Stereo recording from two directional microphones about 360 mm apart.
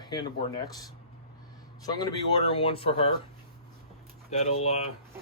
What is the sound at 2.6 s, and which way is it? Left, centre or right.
Speech, centre.